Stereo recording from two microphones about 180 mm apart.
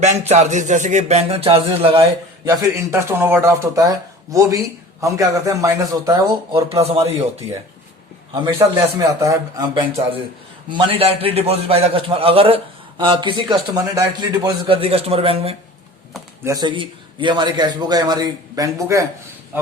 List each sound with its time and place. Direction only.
0.0 s a man's voice: 40° right (ahead or behind)
2.4 s a man's voice: 20° right (ahead or behind); by 7.4 s 35° right (ahead or behind)
8.3 s a man's voice: 25° right (ahead or behind)
16.4 s a man's voice: 20° right (ahead or behind)